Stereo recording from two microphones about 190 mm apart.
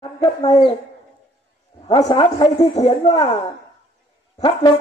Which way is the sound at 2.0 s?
25° left (ahead or behind).